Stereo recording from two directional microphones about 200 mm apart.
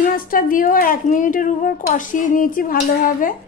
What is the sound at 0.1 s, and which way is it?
Speech, 45° left (ahead or behind).